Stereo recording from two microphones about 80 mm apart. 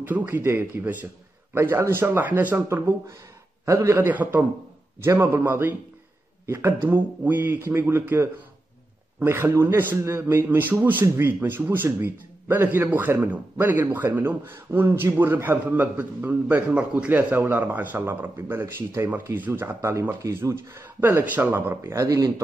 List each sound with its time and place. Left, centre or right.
0.0 s a man's voice: right
3.6 s a man's voice: right
4.0 s a man's voice: right
6.9 s a man's voice: right
21.0 s a man's voice: right
22.0 s speech: right